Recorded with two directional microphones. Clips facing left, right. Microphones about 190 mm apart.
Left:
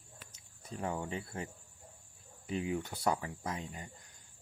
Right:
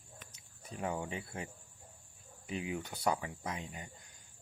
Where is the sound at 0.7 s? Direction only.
10° right (ahead or behind).